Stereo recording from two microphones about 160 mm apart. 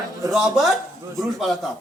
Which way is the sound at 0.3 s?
Centre (ahead or behind).